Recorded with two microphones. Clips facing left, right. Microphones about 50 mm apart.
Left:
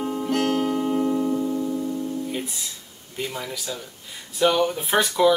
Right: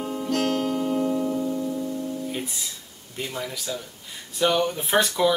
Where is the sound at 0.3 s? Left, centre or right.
Centre.